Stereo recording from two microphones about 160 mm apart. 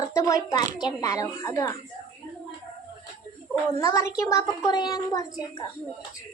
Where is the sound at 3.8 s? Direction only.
20° left (ahead or behind).